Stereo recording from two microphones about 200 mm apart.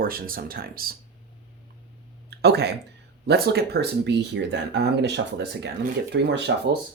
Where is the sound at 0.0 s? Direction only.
45° right (ahead or behind).